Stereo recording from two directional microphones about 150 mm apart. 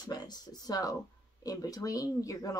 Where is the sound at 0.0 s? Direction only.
25° left (ahead or behind).